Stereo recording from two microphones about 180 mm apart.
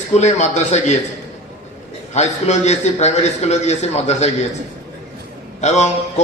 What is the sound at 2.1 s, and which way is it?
A man's voice, 40° left (ahead or behind).